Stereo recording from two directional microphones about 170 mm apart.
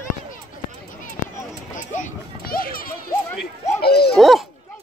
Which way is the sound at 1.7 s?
50° left (ahead or behind).